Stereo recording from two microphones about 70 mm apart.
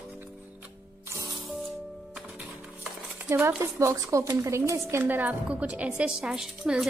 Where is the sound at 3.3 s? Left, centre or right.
Right.